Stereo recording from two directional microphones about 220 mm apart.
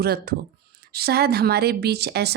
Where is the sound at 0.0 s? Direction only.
45° right (ahead or behind).